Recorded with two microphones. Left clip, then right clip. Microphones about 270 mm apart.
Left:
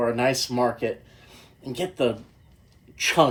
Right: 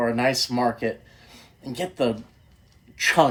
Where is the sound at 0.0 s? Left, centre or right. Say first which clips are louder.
Right 1 dB; right.